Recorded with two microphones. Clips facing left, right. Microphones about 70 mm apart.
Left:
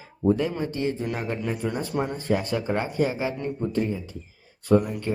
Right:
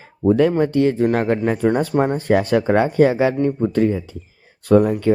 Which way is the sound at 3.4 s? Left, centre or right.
Right.